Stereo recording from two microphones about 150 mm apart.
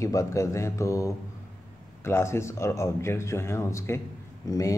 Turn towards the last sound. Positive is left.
turn(degrees=25)  # may be behind; listen again after turning